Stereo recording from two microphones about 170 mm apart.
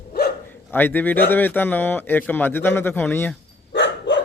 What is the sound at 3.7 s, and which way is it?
Dog, 90° left.